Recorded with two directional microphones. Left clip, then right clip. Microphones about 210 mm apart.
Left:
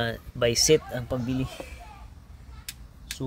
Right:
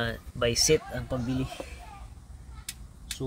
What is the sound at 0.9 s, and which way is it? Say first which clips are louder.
Speech: left 2 dB; 45° left (ahead or behind).